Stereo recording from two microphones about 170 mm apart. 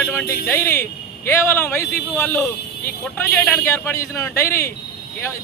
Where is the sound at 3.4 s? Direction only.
10° left (ahead or behind).